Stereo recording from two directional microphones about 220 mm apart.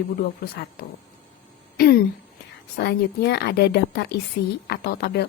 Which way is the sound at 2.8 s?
45° left (ahead or behind).